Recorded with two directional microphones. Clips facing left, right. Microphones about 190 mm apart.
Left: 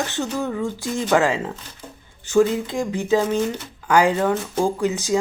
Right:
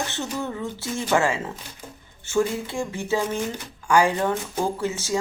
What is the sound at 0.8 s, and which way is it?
Speech, 15° left (ahead or behind).